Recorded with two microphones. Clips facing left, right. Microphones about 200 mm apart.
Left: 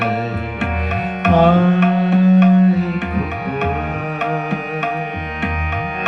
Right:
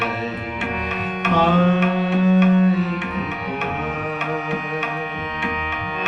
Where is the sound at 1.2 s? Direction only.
60° left (ahead or behind).